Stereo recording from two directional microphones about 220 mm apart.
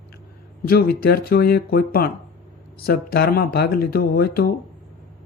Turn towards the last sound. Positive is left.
turn(degrees=45)  # may be behind; listen again after turning